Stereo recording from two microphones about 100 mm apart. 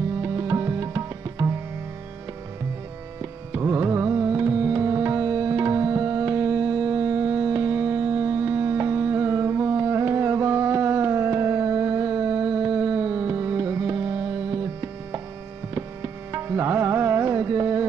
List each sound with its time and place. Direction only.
0.2 s music: 30° right (ahead or behind)
3.2 s music: 25° right (ahead or behind)